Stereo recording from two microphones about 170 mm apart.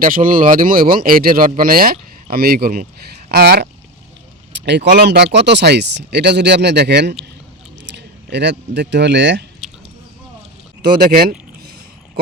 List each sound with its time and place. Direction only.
0.0 s speech: 55° right (ahead or behind)
4.6 s speech: 90° right
7.9 s speech: 90° right
11.0 s speech: 60° right (ahead or behind)